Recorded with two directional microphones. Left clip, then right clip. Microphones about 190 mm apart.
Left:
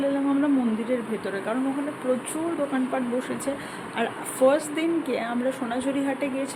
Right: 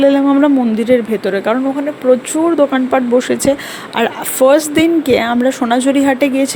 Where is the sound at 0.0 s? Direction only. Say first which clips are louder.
Right 14 dB; 45° right (ahead or behind).